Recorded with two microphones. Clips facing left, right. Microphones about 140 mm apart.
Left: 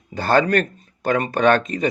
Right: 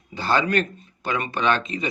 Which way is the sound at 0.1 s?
50° left (ahead or behind).